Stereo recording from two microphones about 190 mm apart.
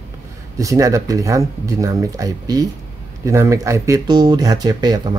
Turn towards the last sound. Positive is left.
turn(degrees=-20)  # may be behind; listen again after turning